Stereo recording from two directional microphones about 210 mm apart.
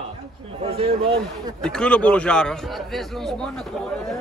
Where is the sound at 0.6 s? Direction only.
30° right (ahead or behind).